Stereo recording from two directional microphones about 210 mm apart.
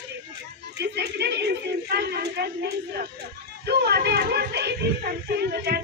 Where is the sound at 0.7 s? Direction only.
50° right (ahead or behind).